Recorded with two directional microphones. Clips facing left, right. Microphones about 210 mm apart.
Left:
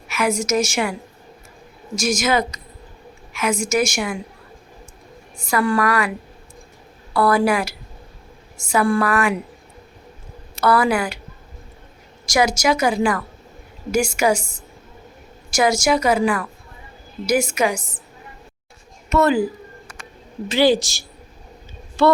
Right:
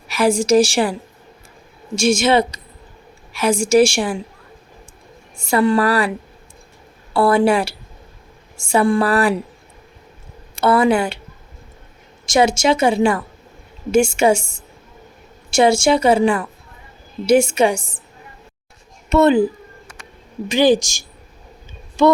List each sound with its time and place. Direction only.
0.1 s a woman's voice: 30° right (ahead or behind)
2.0 s a woman's voice: 30° right (ahead or behind)
5.4 s a woman's voice: 25° right (ahead or behind)
10.6 s a woman's voice: 25° right (ahead or behind)
12.2 s a woman's voice: 25° right (ahead or behind)
19.0 s a woman's voice: 25° right (ahead or behind)
20.5 s a woman's voice: 15° right (ahead or behind)